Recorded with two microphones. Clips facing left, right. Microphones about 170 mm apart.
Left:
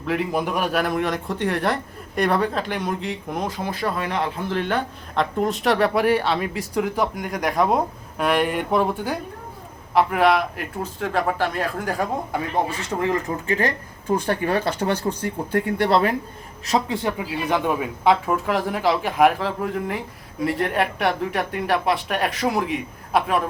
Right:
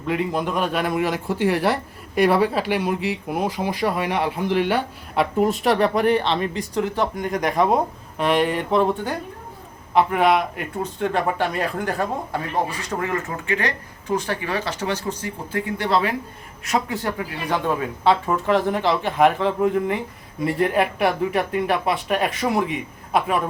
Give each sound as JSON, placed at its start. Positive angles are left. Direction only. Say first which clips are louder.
{"t": 0.0, "sound": "speech", "louder": "even", "side_deg": 0}
{"t": 13.0, "sound": "speech", "louder": "left 3 dB", "side_deg": 30}
{"t": 14.2, "sound": "speech", "louder": "left 4 dB", "side_deg": 55}
{"t": 16.6, "sound": "speech", "louder": "left 1 dB", "side_deg": 30}
{"t": 17.1, "sound": "speech", "louder": "left 2 dB", "side_deg": 15}